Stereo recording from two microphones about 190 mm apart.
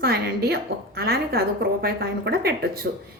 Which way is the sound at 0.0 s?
55° right (ahead or behind).